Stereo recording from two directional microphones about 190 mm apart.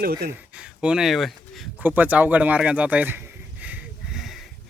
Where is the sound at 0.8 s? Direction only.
5° right (ahead or behind).